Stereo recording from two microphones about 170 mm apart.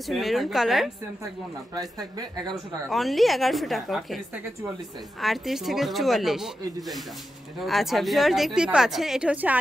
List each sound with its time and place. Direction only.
0.0 s a woman's voice: centre (ahead or behind)
1.8 s speech: 25° right (ahead or behind)
2.5 s a woman's voice: centre (ahead or behind)
5.2 s a woman's voice: centre (ahead or behind)
7.6 s a woman's voice: centre (ahead or behind)